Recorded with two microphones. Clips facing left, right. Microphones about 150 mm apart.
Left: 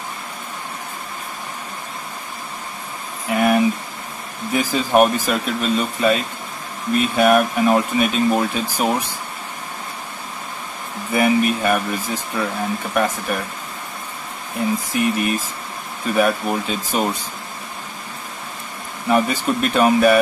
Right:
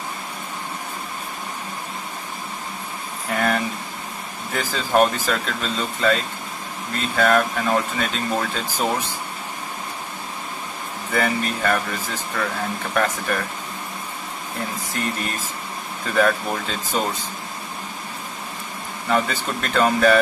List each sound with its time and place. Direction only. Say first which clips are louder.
3.3 s a sound: left 6 dB; 10° left (ahead or behind)
4.5 s speech: left 5 dB; 15° left (ahead or behind)
11.1 s speech: left 6 dB; 15° left (ahead or behind)
15.0 s speech: left 6 dB; 15° left (ahead or behind)
19.0 s speech: left 4 dB; 15° left (ahead or behind)